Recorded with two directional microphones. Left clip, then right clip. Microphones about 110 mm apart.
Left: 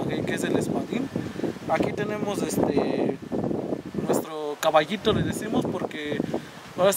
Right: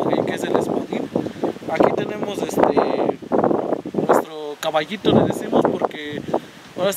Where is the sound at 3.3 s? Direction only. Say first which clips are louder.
Right 10 dB; 65° right (ahead or behind).